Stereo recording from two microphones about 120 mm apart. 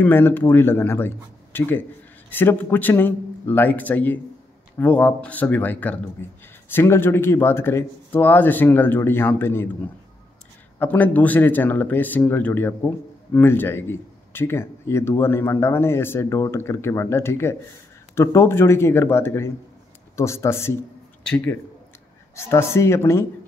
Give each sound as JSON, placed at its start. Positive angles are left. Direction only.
{"t": 0.0, "sound": "speech", "side_deg": 15}
{"t": 10.8, "sound": "speech", "side_deg": 15}
{"t": 22.3, "sound": "speech", "side_deg": 20}